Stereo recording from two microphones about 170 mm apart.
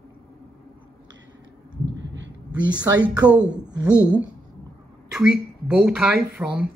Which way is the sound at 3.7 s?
25° right (ahead or behind).